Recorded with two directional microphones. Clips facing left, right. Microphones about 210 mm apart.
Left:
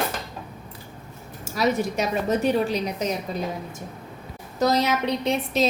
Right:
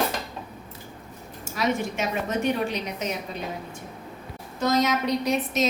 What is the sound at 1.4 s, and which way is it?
A woman's voice, 40° left (ahead or behind).